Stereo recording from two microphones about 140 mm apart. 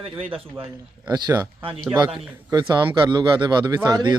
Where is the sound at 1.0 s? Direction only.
30° right (ahead or behind).